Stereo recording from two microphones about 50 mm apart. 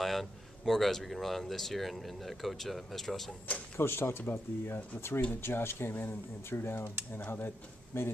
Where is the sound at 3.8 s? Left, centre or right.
Left.